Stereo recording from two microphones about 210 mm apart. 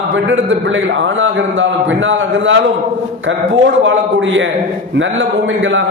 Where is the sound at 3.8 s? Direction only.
65° right (ahead or behind).